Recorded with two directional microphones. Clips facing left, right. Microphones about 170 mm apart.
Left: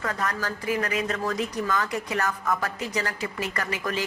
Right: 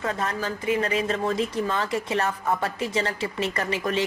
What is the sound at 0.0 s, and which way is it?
Speech, 25° right (ahead or behind).